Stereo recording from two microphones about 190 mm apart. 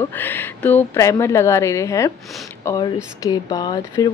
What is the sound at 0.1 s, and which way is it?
Speech, 10° left (ahead or behind).